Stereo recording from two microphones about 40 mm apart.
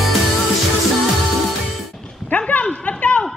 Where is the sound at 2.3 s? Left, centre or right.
Left.